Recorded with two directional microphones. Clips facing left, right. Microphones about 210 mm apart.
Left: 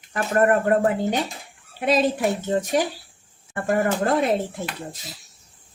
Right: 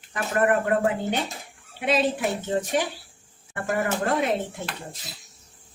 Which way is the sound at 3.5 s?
35° left (ahead or behind).